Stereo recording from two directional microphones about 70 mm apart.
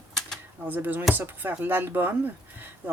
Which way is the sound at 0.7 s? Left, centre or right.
Right.